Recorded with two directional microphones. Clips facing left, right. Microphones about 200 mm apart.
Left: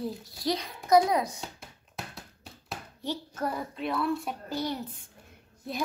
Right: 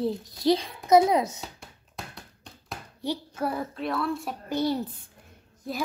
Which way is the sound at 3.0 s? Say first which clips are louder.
Right 3 dB; 10° right (ahead or behind).